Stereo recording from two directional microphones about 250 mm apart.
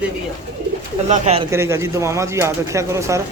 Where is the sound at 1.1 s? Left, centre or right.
Right.